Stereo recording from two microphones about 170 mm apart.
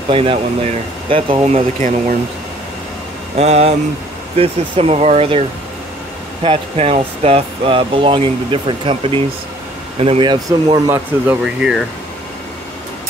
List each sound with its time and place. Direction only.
0.1 s speech: 30° right (ahead or behind)
1.8 s speech: 50° right (ahead or behind)
3.3 s speech: 40° right (ahead or behind)
6.4 s speech: 35° right (ahead or behind)
11.4 s speech: centre (ahead or behind)